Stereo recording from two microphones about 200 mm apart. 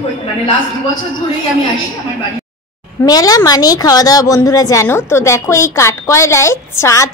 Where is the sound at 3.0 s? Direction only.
20° left (ahead or behind).